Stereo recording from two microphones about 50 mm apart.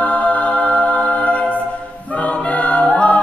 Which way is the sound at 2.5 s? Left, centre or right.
Left.